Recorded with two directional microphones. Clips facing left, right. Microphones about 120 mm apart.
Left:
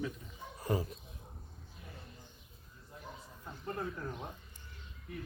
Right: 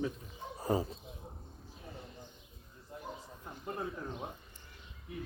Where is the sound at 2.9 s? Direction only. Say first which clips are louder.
Right 4 dB; 15° right (ahead or behind).